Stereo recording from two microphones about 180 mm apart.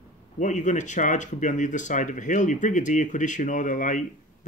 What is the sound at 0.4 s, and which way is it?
Speech, 45° left (ahead or behind).